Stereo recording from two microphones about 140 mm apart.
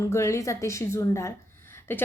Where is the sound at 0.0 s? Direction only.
20° left (ahead or behind).